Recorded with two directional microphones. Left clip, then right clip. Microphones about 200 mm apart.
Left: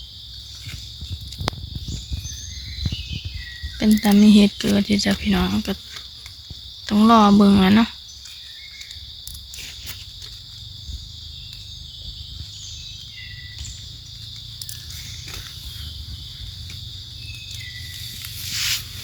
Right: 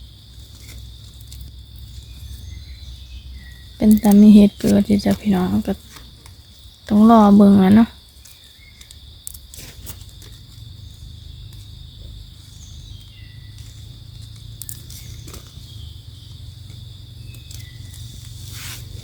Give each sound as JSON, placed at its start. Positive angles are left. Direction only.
{"t": 3.8, "sound": "speech", "side_deg": -40}
{"t": 6.8, "sound": "speech", "side_deg": -30}
{"t": 18.5, "sound": "zipper", "side_deg": -50}